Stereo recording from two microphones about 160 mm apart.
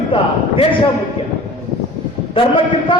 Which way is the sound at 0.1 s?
35° left (ahead or behind).